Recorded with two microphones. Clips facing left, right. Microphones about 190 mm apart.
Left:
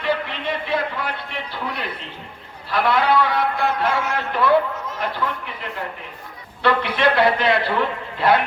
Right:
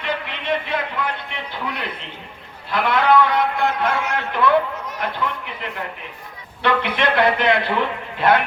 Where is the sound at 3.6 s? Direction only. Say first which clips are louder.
Even; 20° right (ahead or behind).